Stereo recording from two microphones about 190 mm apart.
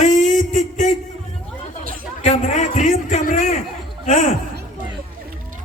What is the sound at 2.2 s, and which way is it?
A man's voice, 40° left (ahead or behind).